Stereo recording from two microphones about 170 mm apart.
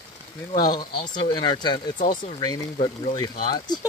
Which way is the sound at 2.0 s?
50° left (ahead or behind).